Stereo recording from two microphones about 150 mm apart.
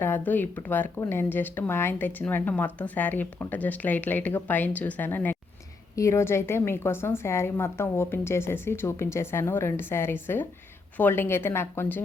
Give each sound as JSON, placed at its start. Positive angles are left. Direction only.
{"t": 0.0, "sound": "speech", "side_deg": 15}